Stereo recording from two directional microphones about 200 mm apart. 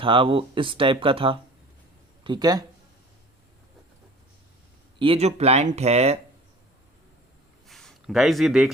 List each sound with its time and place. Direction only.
0.0 s speech: 25° right (ahead or behind)
4.9 s speech: 30° right (ahead or behind)
7.7 s a sound: centre (ahead or behind)